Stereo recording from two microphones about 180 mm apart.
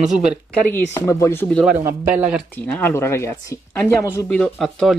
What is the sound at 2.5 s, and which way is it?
Speech, 10° left (ahead or behind).